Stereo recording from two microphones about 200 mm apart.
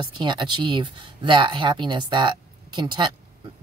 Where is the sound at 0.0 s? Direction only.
25° right (ahead or behind).